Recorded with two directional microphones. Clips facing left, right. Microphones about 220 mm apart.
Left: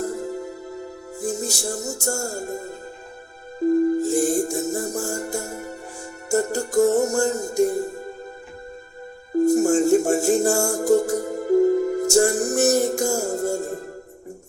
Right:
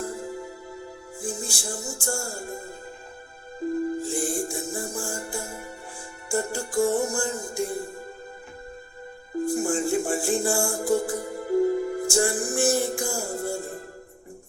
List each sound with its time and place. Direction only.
0.0 s music: 40° left (ahead or behind)
9.4 s music: 45° left (ahead or behind)